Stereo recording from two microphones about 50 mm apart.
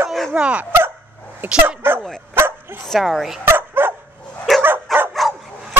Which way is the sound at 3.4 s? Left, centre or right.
Right.